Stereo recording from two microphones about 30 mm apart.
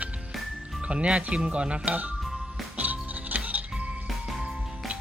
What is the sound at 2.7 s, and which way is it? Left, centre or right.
Music, right.